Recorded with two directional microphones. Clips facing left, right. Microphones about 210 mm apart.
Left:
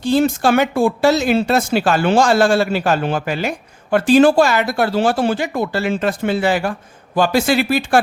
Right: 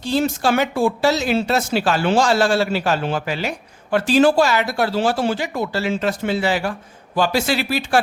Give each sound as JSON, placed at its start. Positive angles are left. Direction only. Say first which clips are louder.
{"t": 0.0, "sound": "speech", "louder": "left 4 dB", "side_deg": 50}